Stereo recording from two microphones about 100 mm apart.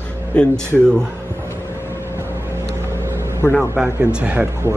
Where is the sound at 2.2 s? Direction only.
25° right (ahead or behind).